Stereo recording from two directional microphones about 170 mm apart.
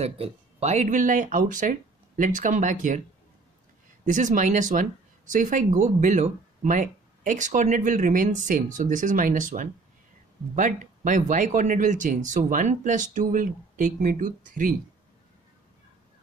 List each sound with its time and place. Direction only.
0.0 s speech: 40° right (ahead or behind)
4.0 s speech: 45° right (ahead or behind)